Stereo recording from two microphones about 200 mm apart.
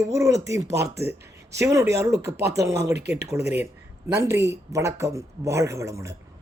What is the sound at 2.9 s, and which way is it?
Speech, 55° right (ahead or behind).